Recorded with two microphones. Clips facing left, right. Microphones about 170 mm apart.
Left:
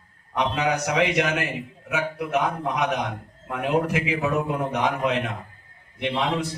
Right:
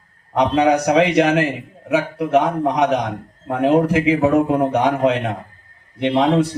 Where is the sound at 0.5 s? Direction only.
35° right (ahead or behind).